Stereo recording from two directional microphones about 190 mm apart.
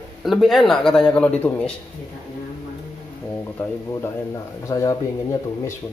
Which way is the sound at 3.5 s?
15° left (ahead or behind).